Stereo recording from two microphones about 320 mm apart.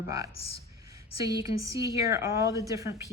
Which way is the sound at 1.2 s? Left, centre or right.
Centre.